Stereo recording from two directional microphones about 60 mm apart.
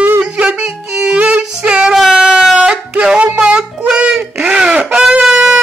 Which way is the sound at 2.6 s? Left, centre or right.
Centre.